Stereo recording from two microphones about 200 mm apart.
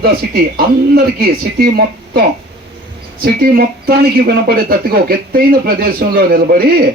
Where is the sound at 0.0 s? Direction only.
50° right (ahead or behind).